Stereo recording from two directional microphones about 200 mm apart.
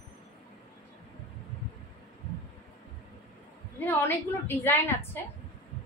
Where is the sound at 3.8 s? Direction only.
10° left (ahead or behind).